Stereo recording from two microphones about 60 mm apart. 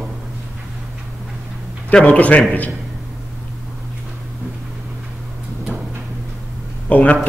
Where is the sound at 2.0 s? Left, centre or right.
Left.